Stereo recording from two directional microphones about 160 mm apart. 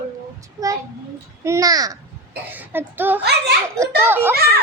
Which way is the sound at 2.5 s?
10° right (ahead or behind).